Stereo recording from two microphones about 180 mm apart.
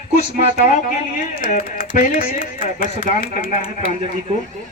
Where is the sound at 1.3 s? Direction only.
50° left (ahead or behind).